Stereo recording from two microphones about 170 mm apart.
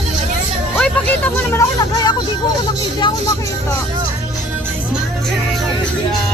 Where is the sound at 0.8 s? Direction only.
10° left (ahead or behind).